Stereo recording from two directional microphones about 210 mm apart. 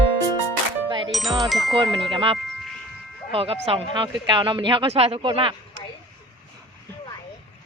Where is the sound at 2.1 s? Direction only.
25° right (ahead or behind).